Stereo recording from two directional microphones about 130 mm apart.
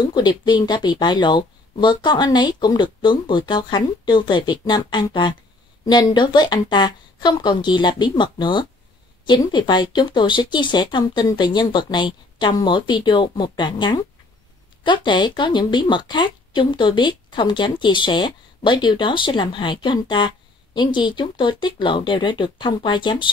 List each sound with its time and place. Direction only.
0.1 s a woman's voice: 35° left (ahead or behind)